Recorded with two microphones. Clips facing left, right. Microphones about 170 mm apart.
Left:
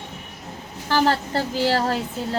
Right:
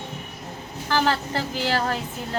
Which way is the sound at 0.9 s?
35° left (ahead or behind).